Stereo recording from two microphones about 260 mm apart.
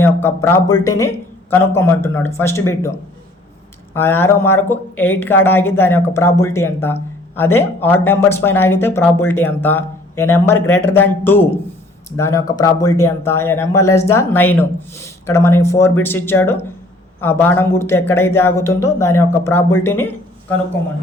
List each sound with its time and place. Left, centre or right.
0.0 s speech: centre
3.9 s speech: centre